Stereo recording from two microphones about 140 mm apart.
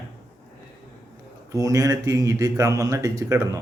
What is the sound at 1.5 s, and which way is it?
Speech, 25° right (ahead or behind).